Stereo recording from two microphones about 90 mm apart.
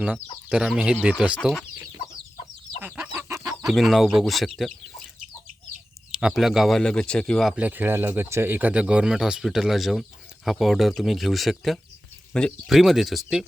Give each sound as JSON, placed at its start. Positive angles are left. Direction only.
{"t": 0.5, "sound": "speech", "side_deg": -5}
{"t": 2.8, "sound": "chicken", "side_deg": -20}
{"t": 3.7, "sound": "speech", "side_deg": 0}
{"t": 6.1, "sound": "speech", "side_deg": -5}
{"t": 7.4, "sound": "speech", "side_deg": -15}
{"t": 12.6, "sound": "speech", "side_deg": 0}